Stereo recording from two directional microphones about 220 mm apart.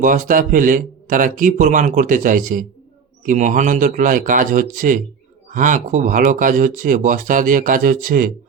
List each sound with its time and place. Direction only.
0.0 s speech: 35° right (ahead or behind)